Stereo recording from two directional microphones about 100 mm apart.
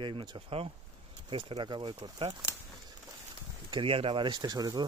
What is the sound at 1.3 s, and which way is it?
Speech, 60° right (ahead or behind).